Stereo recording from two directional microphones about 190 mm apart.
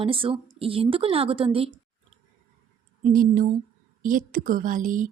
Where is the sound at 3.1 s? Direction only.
45° right (ahead or behind).